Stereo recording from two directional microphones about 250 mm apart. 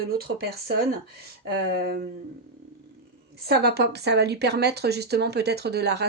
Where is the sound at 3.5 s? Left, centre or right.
Right.